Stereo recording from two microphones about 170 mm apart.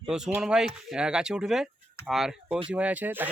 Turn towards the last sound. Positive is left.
turn(degrees=-10)  # may be behind; listen again after turning